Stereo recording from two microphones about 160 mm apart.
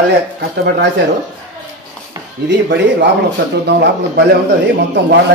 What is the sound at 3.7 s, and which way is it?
Speech, 90° right.